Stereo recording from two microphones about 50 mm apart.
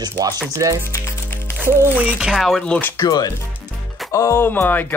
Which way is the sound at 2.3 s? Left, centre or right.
Centre.